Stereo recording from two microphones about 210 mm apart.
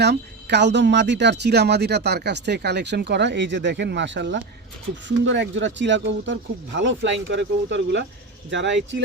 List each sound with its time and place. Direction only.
0.0 s speech: 55° right (ahead or behind)